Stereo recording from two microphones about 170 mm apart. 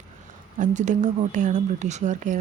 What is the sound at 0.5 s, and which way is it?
Speech, 45° right (ahead or behind).